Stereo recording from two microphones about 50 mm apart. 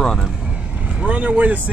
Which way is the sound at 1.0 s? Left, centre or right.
Right.